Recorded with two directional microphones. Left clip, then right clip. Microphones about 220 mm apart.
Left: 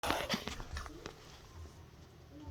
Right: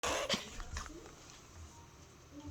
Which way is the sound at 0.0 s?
10° right (ahead or behind).